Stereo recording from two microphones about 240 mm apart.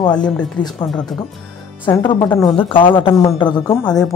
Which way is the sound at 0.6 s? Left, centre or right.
Centre.